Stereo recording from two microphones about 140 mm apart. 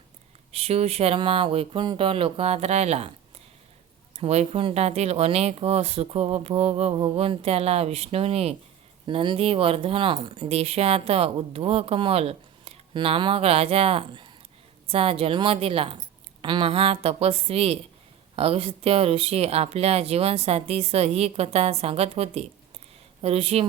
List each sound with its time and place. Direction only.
0.5 s speech: 45° right (ahead or behind)
4.2 s speech: 45° right (ahead or behind)
9.0 s speech: 35° right (ahead or behind)